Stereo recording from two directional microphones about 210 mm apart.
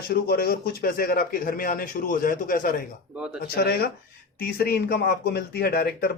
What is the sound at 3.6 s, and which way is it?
Speech, 50° left (ahead or behind).